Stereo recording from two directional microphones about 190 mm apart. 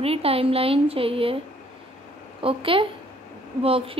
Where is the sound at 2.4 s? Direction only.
30° right (ahead or behind).